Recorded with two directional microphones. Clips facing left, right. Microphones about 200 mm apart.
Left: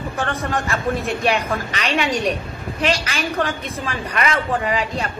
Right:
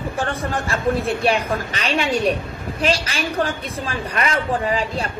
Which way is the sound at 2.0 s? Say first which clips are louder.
Right 1 dB; 35° right (ahead or behind).